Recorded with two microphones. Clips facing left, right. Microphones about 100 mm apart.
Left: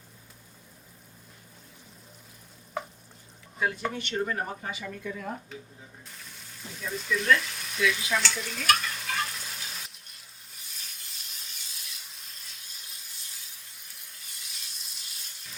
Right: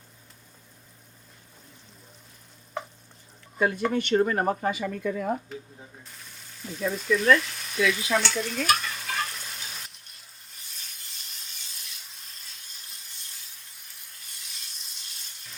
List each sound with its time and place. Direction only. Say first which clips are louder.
3.9 s speech: right 8 dB; 55° right (ahead or behind)
6.1 s speech: even; centre (ahead or behind)
7.3 s frying: right 4 dB; centre (ahead or behind)
8.7 s stir: left 2 dB; centre (ahead or behind)
13.7 s a sound: even; centre (ahead or behind)